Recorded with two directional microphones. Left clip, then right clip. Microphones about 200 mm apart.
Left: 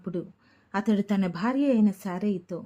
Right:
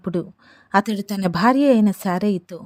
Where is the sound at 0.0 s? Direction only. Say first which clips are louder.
Right 8 dB; 40° right (ahead or behind).